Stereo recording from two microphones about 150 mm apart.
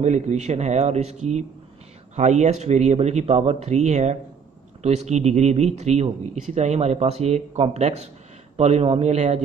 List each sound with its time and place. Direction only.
0.0 s speech: 50° right (ahead or behind)